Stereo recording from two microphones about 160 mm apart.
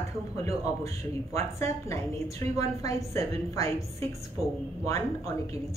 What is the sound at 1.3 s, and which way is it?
A woman's voice, 20° left (ahead or behind).